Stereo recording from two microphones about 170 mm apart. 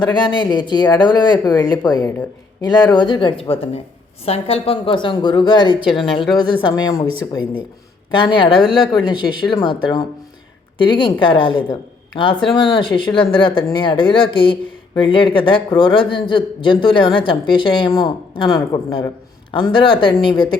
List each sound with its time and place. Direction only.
0.0 s speech: 25° left (ahead or behind)
8.1 s speech: 30° left (ahead or behind)